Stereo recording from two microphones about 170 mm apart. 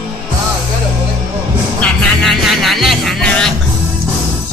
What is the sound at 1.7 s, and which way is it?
Music, centre (ahead or behind).